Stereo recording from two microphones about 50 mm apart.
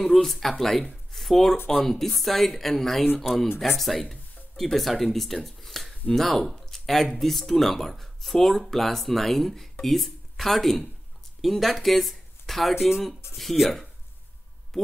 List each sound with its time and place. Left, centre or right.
0.0 s speech: centre
12.7 s speech: centre
13.4 s speech: centre